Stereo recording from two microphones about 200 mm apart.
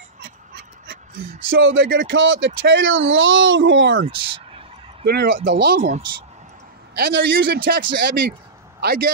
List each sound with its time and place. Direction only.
1.5 s speech: 75° right (ahead or behind)
5.0 s a man's voice: 55° right (ahead or behind)
7.0 s a man's voice: 65° right (ahead or behind)